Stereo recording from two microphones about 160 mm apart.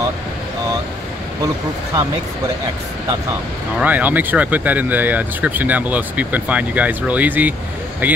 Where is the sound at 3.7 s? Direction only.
10° right (ahead or behind).